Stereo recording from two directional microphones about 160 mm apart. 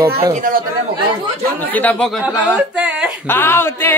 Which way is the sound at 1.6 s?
10° left (ahead or behind).